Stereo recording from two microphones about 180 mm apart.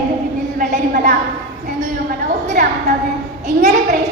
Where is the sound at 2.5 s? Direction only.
50° right (ahead or behind).